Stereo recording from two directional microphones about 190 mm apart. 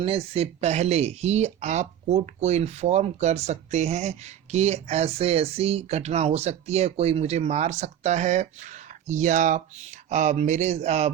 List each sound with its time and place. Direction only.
0.0 s speech: 30° right (ahead or behind)